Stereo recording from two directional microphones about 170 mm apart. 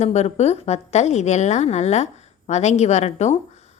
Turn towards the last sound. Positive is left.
turn(degrees=40)  # may be behind; listen again after turning